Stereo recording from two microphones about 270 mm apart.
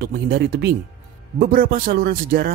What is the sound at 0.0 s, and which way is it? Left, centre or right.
Speech, right.